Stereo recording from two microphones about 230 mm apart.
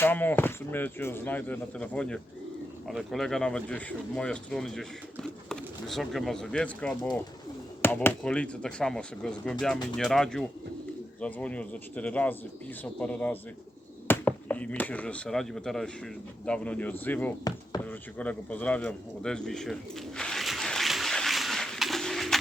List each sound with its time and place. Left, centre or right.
0.0 s speech: centre
18.2 s bird: centre